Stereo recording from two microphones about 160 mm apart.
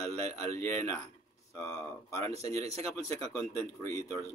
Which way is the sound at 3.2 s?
20° left (ahead or behind).